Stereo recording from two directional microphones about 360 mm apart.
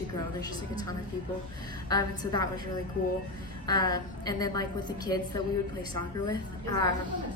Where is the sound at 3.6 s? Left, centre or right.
Centre.